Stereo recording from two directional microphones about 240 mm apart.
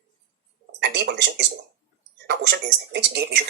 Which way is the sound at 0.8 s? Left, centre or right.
Right.